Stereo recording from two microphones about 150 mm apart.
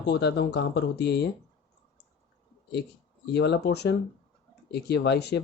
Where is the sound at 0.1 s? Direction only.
90° left.